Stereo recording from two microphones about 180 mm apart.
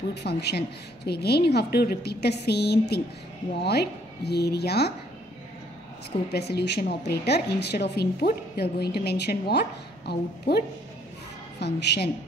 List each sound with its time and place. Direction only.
0.1 s speech: 70° left (ahead or behind)
6.3 s speech: 65° left (ahead or behind)
11.6 s speech: 65° left (ahead or behind)